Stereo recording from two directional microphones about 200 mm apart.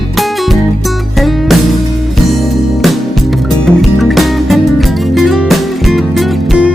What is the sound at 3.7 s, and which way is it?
Music, centre (ahead or behind).